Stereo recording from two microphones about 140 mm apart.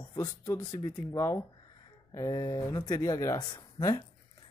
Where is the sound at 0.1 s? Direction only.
25° left (ahead or behind).